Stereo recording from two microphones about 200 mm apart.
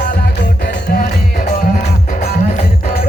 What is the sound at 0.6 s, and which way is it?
Music, 50° left (ahead or behind).